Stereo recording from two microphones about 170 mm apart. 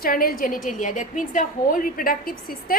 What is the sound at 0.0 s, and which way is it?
A woman's voice, 60° left (ahead or behind).